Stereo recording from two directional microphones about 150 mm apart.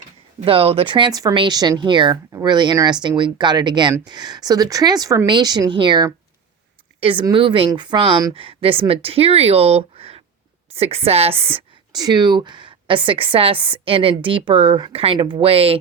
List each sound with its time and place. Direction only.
0.4 s speech: 40° right (ahead or behind)